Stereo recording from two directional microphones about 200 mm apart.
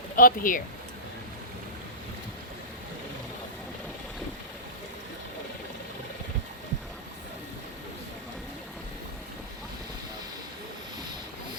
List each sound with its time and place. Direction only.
0.2 s speech: 45° left (ahead or behind)